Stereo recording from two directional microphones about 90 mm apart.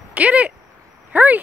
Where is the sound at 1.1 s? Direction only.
20° right (ahead or behind).